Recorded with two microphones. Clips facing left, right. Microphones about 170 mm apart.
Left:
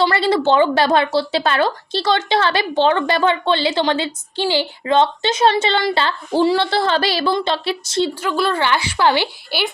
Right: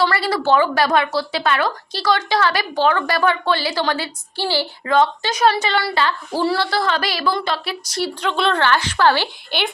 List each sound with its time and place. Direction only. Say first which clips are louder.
0.0 s speech: left 3 dB; 20° left (ahead or behind)
8.2 s a woman's voice: even; 5° left (ahead or behind)